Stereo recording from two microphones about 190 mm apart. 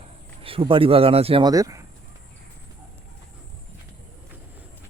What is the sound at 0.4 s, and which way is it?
Speech, 30° right (ahead or behind).